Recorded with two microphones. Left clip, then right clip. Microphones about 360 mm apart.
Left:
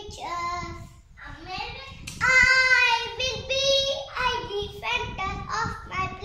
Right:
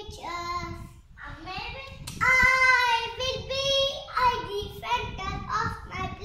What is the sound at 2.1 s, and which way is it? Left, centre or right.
Child singing, centre.